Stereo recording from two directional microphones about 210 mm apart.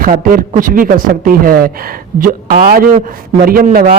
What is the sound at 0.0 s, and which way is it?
A man's voice, 40° right (ahead or behind).